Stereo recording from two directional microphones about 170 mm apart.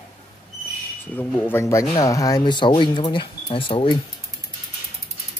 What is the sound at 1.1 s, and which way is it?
Speech, 15° left (ahead or behind).